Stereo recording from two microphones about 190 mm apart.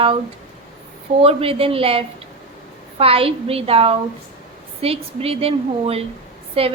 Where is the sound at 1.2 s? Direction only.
30° right (ahead or behind).